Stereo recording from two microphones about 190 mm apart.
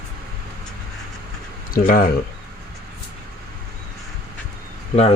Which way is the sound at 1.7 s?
45° left (ahead or behind).